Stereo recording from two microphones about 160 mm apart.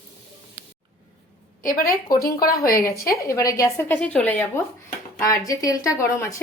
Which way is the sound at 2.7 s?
20° left (ahead or behind).